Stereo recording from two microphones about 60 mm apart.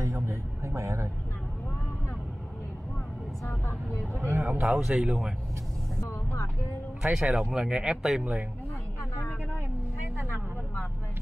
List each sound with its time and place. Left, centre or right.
0.0 s a sound: right
3.4 s vehicle: left
4.2 s a sound: right
4.6 s speech: centre
5.9 s vehicle: left
7.0 s speech: centre
8.0 s speech: centre